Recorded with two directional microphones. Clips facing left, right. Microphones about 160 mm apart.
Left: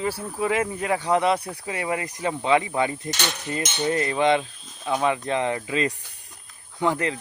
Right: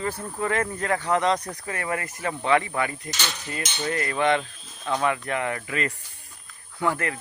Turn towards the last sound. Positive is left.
turn(degrees=20)  # may be behind; listen again after turning